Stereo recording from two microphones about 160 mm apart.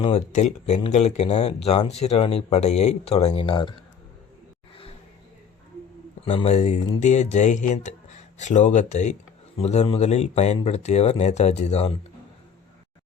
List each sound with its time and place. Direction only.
0.0 s speech: 40° left (ahead or behind)
6.2 s speech: 40° left (ahead or behind)